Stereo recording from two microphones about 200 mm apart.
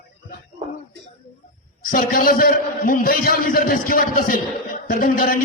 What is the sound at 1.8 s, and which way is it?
A man's voice, 45° left (ahead or behind).